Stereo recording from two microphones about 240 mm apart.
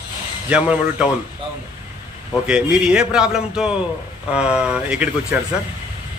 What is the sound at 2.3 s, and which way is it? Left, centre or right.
Speech, centre.